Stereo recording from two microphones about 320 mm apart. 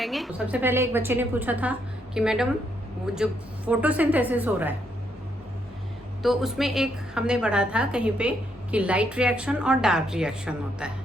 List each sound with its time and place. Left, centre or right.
0.0 s a woman's voice: centre
6.2 s a woman's voice: centre